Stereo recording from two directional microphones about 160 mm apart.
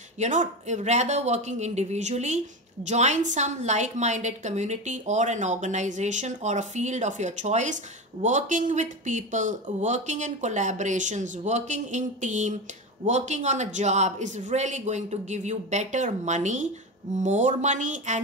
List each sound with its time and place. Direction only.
0.2 s speech: 50° right (ahead or behind)